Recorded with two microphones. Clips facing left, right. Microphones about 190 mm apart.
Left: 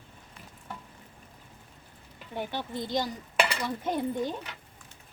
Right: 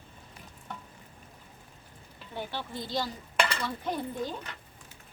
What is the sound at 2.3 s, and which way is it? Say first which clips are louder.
Speech: left 3 dB; 20° left (ahead or behind).